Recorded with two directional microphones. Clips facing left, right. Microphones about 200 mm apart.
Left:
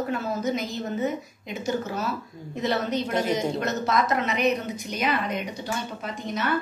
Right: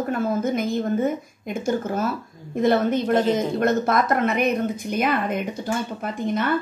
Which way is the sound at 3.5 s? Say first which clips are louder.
Right 5 dB; 55° right (ahead or behind).